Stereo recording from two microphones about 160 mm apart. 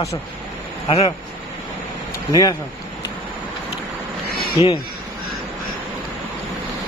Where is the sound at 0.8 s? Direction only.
40° left (ahead or behind).